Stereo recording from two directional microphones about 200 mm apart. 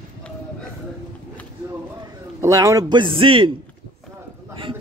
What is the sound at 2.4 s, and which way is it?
A man's voice, 15° right (ahead or behind).